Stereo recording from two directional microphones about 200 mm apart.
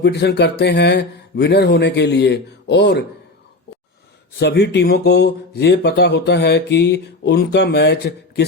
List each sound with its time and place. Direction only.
0.0 s speech: 55° left (ahead or behind)
4.4 s speech: 55° left (ahead or behind)